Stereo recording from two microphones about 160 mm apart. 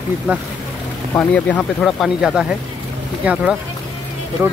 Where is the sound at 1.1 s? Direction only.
10° left (ahead or behind).